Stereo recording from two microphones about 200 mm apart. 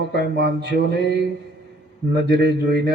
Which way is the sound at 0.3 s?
55° right (ahead or behind).